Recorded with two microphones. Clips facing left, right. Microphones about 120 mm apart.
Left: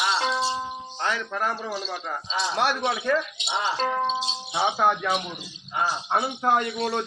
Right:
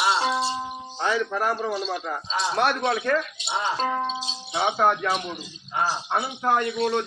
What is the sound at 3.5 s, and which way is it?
Speech, 5° right (ahead or behind).